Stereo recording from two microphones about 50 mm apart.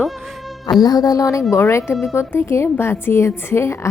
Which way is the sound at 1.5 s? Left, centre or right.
Left.